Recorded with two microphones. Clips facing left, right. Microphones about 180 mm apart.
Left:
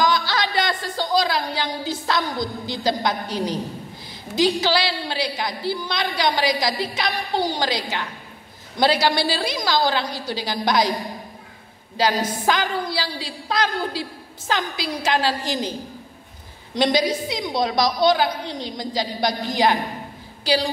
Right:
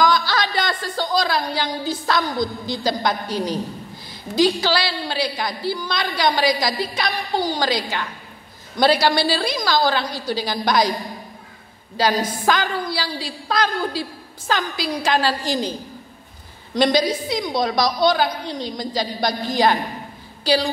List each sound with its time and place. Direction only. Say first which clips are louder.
0.0 s a sound: right 2 dB; 20° left (ahead or behind)
4.4 s a woman's voice: right 1 dB; 20° left (ahead or behind)
12.0 s a woman's voice: right 1 dB; 20° left (ahead or behind)
16.7 s a woman's voice: right 2 dB; 20° left (ahead or behind)